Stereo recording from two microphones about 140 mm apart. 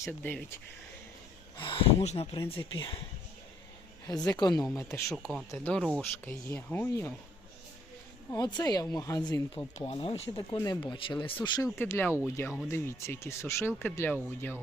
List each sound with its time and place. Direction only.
0.0 s speech: 15° left (ahead or behind)
1.5 s speech: 35° left (ahead or behind)
4.0 s speech: 30° left (ahead or behind)
5.1 s speech: 5° right (ahead or behind)
5.5 s speech: 15° left (ahead or behind)
8.4 s speech: 30° left (ahead or behind)
9.7 s speech: 45° left (ahead or behind)
10.3 s speech: 25° left (ahead or behind)
11.8 s speech: 15° left (ahead or behind)